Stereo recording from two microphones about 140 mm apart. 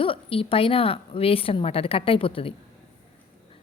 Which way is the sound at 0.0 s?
40° left (ahead or behind).